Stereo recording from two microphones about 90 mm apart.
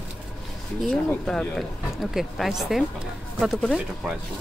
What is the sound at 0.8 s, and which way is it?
Speech, 5° left (ahead or behind).